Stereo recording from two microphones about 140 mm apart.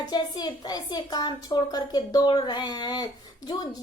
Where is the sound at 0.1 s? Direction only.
30° left (ahead or behind).